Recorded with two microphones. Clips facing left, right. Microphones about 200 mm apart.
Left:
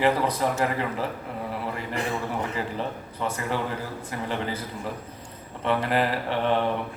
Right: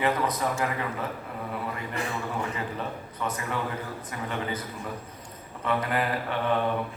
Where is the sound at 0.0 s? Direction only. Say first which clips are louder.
Left 3 dB; 30° left (ahead or behind).